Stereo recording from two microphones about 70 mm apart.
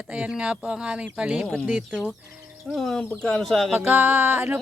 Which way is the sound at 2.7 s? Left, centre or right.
Centre.